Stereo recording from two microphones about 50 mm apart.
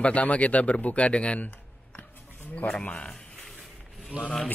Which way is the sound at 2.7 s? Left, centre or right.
Centre.